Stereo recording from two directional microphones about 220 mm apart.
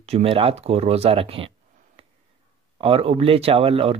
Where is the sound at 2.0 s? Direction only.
25° right (ahead or behind).